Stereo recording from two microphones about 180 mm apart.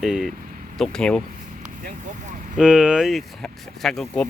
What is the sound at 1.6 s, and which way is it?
Vehicle, 45° right (ahead or behind).